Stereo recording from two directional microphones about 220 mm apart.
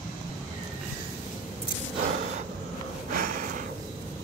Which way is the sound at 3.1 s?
40° right (ahead or behind).